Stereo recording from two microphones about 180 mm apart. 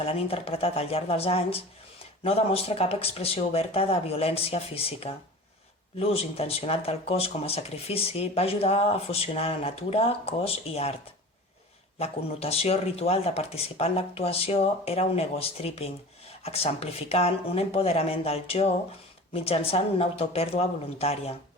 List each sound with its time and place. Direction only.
0.0 s speech: 35° left (ahead or behind)
11.9 s speech: 35° left (ahead or behind)